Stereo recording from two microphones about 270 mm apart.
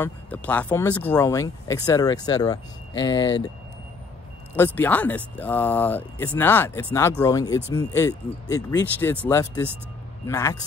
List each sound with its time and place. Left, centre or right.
0.0 s speech: centre
4.7 s speech: centre